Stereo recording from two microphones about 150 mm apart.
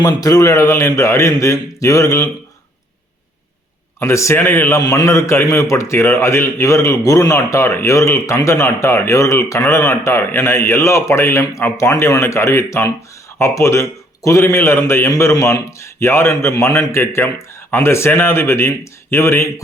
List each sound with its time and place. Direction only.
0.0 s a man's voice: 25° left (ahead or behind)
4.0 s a man's voice: 20° left (ahead or behind)